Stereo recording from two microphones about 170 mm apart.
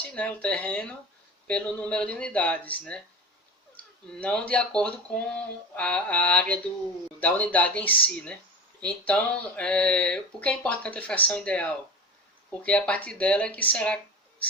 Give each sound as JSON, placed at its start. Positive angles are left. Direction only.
{"t": 0.0, "sound": "speech", "side_deg": 5}
{"t": 4.1, "sound": "speech", "side_deg": 5}